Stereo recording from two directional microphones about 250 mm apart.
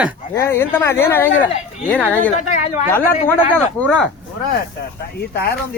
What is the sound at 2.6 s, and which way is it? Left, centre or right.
Speech, left.